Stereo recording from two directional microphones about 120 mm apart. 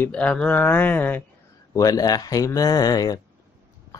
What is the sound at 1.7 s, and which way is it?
Speech, 30° left (ahead or behind).